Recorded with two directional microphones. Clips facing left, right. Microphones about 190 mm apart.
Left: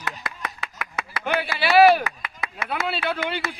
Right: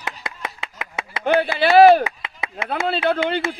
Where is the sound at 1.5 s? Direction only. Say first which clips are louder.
Right 4 dB; 50° right (ahead or behind).